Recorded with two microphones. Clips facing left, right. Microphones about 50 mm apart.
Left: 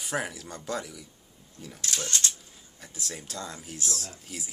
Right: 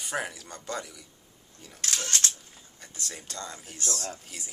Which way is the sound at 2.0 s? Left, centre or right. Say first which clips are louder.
Right 1 dB; right.